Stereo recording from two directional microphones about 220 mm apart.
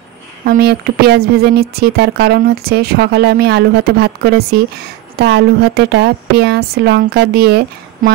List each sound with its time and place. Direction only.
0.5 s speech: 45° right (ahead or behind)